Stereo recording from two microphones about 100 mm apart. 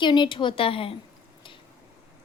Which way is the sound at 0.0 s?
50° left (ahead or behind).